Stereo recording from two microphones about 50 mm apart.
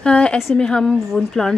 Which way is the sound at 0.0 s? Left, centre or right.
Left.